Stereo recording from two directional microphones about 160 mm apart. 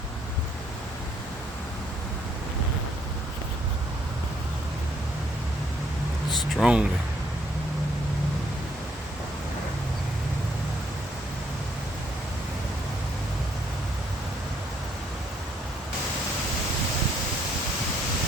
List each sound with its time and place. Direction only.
6.6 s speech: 5° right (ahead or behind)